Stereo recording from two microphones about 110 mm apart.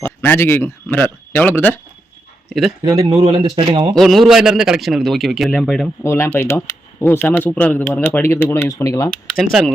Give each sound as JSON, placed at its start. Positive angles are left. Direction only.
{"t": 0.0, "sound": "speech", "side_deg": 20}
{"t": 2.5, "sound": "a man's voice", "side_deg": 0}
{"t": 2.8, "sound": "speech", "side_deg": -35}
{"t": 3.9, "sound": "a man's voice", "side_deg": 0}
{"t": 6.0, "sound": "speech", "side_deg": 20}
{"t": 9.3, "sound": "a man's voice", "side_deg": 0}